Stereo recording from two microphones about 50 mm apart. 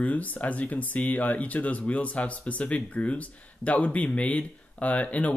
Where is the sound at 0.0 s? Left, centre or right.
Left.